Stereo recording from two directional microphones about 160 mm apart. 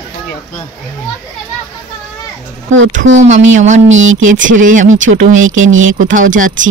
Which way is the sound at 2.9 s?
50° right (ahead or behind).